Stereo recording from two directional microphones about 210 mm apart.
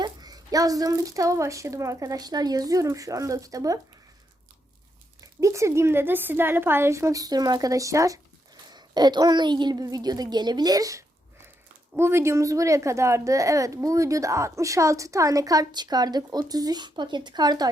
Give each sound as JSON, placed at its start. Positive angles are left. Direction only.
{"t": 0.0, "sound": "a child's voice", "side_deg": -20}
{"t": 5.2, "sound": "a child's voice", "side_deg": -15}